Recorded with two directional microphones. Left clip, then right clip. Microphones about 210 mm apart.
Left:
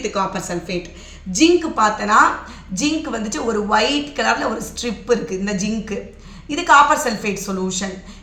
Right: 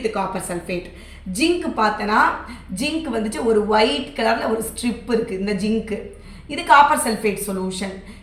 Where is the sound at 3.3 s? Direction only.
45° left (ahead or behind).